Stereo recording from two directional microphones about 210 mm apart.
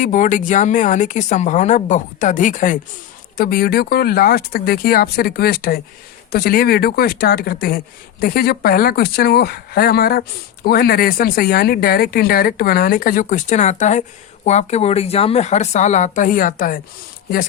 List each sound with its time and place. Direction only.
0.0 s a woman's voice: 35° left (ahead or behind)